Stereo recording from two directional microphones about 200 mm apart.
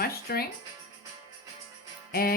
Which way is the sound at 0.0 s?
50° left (ahead or behind).